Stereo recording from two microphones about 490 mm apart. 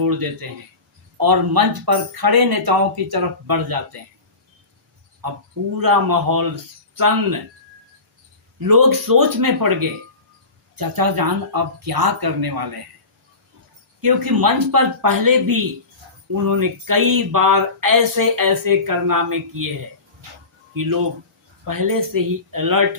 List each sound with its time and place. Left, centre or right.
0.0 s speech: right
5.2 s speech: right
8.5 s speech: right
14.0 s speech: right
20.7 s speech: right